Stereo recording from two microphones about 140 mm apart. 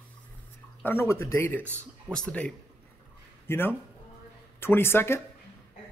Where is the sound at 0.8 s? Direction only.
15° left (ahead or behind).